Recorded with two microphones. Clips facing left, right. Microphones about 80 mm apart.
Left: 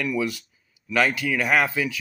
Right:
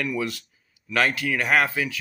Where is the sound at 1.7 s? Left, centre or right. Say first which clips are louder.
Left 1 dB; right.